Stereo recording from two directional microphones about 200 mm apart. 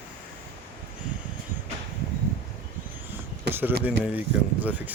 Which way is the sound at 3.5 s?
55° right (ahead or behind).